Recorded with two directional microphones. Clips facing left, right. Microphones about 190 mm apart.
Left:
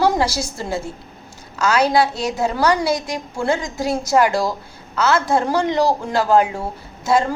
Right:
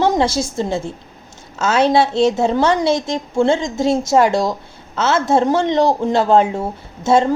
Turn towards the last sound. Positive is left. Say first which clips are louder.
# right 3 dB
turn(degrees=-25)  # may be behind; listen again after turning